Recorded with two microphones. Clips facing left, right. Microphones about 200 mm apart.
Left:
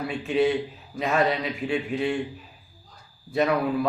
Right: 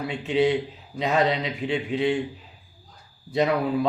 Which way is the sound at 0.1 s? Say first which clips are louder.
Right 1 dB; 20° right (ahead or behind).